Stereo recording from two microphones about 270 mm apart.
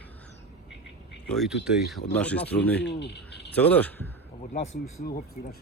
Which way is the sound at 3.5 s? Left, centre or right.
Centre.